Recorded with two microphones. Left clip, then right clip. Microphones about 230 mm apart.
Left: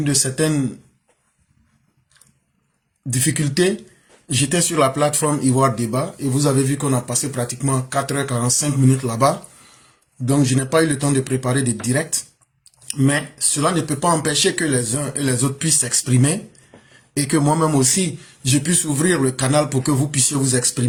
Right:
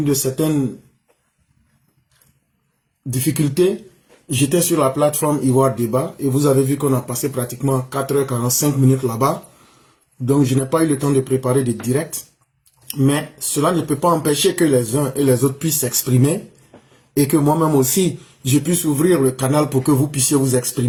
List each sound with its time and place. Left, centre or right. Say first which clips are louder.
0.0 s speech: right 1 dB; left
3.1 s speech: right 1 dB; left